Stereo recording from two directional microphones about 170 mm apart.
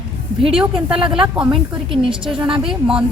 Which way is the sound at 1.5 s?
30° right (ahead or behind).